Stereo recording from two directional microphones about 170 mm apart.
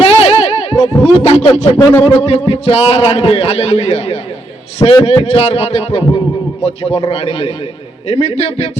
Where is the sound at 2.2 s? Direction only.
35° left (ahead or behind).